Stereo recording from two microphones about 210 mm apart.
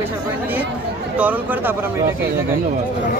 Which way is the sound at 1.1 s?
5° right (ahead or behind).